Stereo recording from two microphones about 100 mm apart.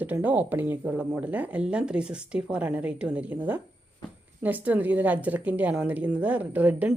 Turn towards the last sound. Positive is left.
turn(degrees=-15)  # may be behind; listen again after turning